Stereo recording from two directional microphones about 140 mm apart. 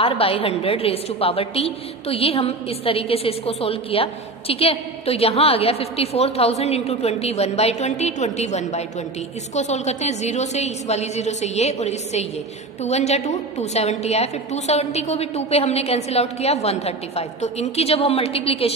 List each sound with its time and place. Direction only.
0.0 s a woman's voice: 40° left (ahead or behind)